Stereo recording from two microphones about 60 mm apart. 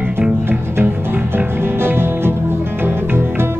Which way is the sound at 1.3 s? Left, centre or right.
Right.